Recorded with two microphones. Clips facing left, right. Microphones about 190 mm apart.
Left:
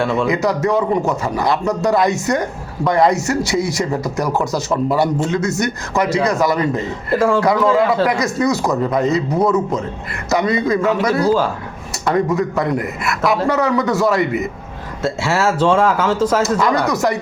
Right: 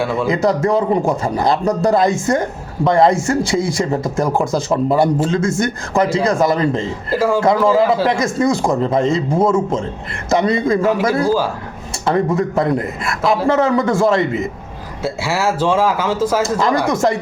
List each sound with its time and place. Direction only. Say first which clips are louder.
0.0 s speech: left 1 dB; 5° right (ahead or behind)
0.4 s a man's voice: right 2 dB; 30° right (ahead or behind)
15.0 s speech: left 1 dB; 10° right (ahead or behind)
16.6 s a man's voice: right 1 dB; 25° right (ahead or behind)